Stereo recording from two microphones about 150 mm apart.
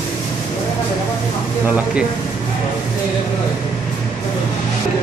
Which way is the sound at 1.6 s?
10° right (ahead or behind).